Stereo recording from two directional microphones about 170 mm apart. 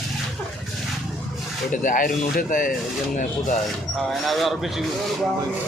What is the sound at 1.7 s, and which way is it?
Speech, 50° left (ahead or behind).